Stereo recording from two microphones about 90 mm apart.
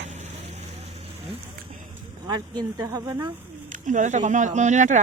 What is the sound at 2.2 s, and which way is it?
Speech, 50° right (ahead or behind).